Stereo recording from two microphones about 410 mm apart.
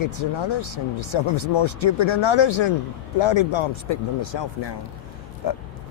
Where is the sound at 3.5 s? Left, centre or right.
Left.